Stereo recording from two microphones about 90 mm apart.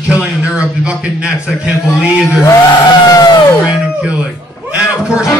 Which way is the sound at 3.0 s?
50° left (ahead or behind).